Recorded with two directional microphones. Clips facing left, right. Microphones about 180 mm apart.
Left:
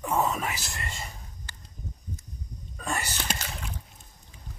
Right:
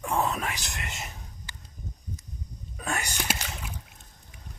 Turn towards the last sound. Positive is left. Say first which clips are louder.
# even
turn(degrees=0)  # may be behind; listen again after turning